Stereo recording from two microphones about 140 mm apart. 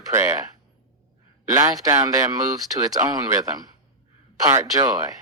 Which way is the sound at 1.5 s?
25° right (ahead or behind).